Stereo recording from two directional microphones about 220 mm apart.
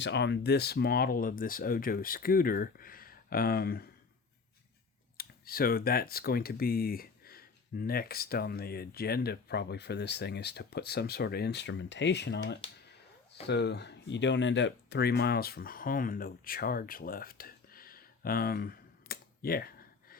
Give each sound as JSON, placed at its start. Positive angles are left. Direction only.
{"t": 0.0, "sound": "speech", "side_deg": 50}
{"t": 5.1, "sound": "speech", "side_deg": 40}